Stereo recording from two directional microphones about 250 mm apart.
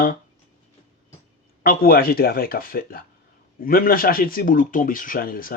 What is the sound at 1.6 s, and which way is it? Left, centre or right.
A man's voice, left.